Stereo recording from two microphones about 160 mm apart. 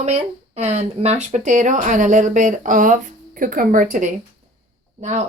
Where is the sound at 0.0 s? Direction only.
45° right (ahead or behind).